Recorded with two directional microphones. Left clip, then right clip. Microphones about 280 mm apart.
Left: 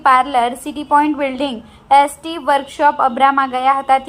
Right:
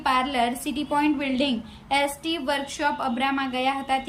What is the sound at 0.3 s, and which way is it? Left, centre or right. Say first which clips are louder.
A woman's voice: left 8 dB; centre.